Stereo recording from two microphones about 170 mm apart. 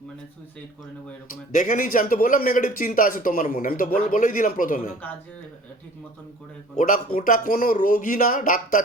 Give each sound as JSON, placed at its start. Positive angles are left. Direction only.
{"t": 1.3, "sound": "a man's voice", "side_deg": 50}
{"t": 6.7, "sound": "a man's voice", "side_deg": 50}